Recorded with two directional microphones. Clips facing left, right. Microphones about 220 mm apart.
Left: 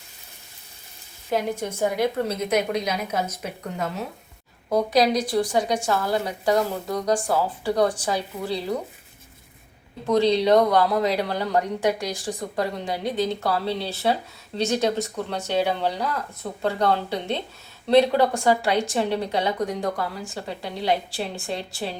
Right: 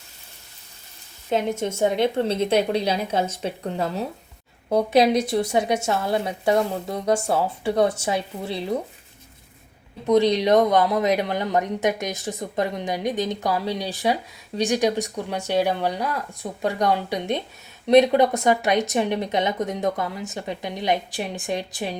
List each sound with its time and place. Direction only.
1.3 s a woman's voice: 25° right (ahead or behind)
10.1 s a woman's voice: 15° right (ahead or behind)